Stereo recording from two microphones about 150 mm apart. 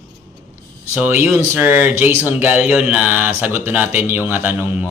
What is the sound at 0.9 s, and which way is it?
Speech, 15° right (ahead or behind).